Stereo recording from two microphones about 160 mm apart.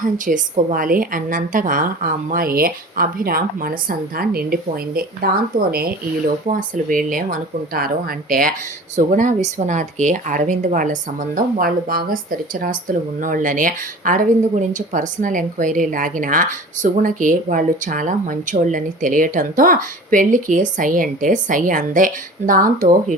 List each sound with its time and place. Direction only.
0.3 s speech: 55° right (ahead or behind)